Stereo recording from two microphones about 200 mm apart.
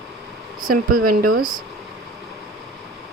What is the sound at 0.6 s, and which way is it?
Speech, 45° right (ahead or behind).